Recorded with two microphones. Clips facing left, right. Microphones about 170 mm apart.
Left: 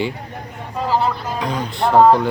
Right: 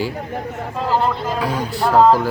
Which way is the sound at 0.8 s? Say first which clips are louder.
Even; 5° left (ahead or behind).